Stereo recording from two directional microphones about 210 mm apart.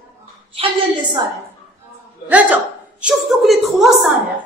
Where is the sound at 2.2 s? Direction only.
5° right (ahead or behind).